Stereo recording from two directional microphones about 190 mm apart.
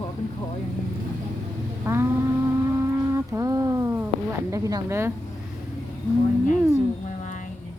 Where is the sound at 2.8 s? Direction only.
15° right (ahead or behind).